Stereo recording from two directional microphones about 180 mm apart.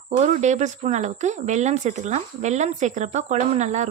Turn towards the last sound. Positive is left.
turn(degrees=-40)  # may be behind; listen again after turning